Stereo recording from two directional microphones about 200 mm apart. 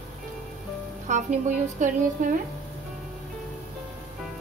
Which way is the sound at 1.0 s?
40° right (ahead or behind).